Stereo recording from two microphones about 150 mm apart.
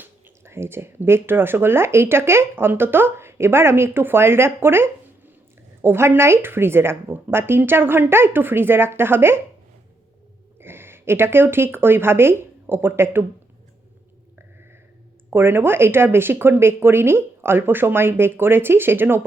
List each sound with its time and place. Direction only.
0.0 s speech: 15° right (ahead or behind)
10.6 s speech: 15° right (ahead or behind)
15.3 s speech: 15° right (ahead or behind)